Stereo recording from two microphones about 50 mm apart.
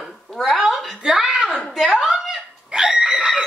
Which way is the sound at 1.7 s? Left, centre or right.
Centre.